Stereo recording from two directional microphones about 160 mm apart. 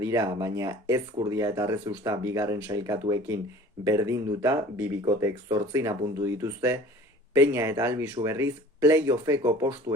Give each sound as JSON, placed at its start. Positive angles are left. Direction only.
{"t": 0.0, "sound": "speech", "side_deg": -20}